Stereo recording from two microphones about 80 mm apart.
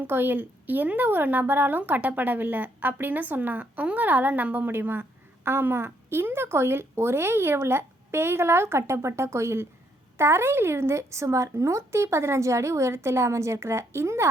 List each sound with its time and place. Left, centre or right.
0.0 s a woman's voice: right